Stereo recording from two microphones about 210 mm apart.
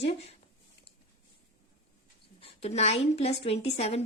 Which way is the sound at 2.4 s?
30° left (ahead or behind).